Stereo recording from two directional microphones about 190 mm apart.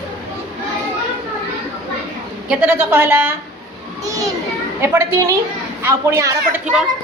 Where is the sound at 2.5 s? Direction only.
5° right (ahead or behind).